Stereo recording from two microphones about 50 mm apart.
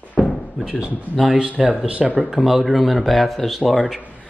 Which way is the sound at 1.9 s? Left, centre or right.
Right.